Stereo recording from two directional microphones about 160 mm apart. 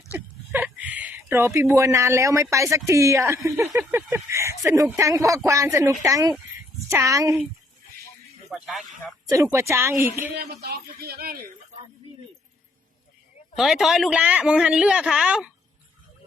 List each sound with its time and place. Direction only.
0.1 s a woman's voice: 10° right (ahead or behind)
8.4 s speech: centre (ahead or behind)
9.3 s speech: 20° right (ahead or behind)
10.3 s speech: 85° right; by 11.5 s 65° right (ahead or behind)
13.6 s speech: centre (ahead or behind)